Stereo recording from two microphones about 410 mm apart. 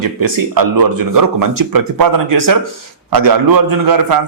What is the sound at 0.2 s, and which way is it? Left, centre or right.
A man's voice, right.